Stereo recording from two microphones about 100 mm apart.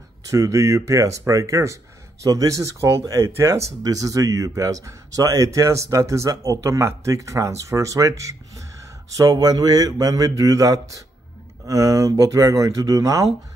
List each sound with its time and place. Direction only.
0.3 s speech: 30° right (ahead or behind)